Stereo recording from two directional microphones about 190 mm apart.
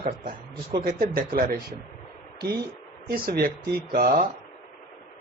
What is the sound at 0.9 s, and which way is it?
Speech, 50° right (ahead or behind).